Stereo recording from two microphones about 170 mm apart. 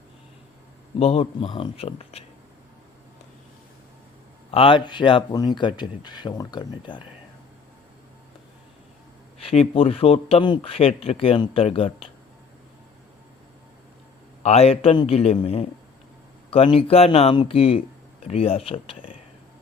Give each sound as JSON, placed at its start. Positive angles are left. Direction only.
{"t": 0.9, "sound": "speech", "side_deg": 35}
{"t": 4.5, "sound": "speech", "side_deg": 30}
{"t": 9.4, "sound": "speech", "side_deg": 35}
{"t": 14.4, "sound": "speech", "side_deg": 40}